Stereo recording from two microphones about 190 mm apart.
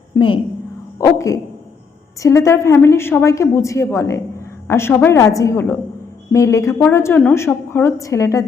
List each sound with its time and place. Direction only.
0.1 s a woman's voice: 15° left (ahead or behind)